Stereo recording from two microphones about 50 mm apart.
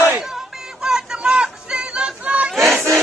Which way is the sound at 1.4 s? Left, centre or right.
Centre.